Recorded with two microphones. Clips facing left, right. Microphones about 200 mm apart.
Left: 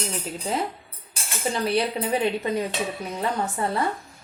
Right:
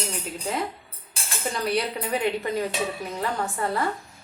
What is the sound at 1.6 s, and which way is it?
Speech, 25° left (ahead or behind).